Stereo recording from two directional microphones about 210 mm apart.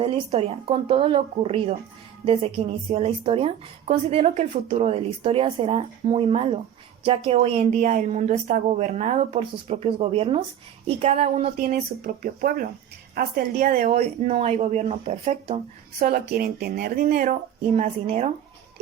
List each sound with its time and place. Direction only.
0.0 s a woman's voice: 30° right (ahead or behind)
11.7 s a woman's voice: 40° right (ahead or behind)
16.0 s a woman's voice: 45° right (ahead or behind)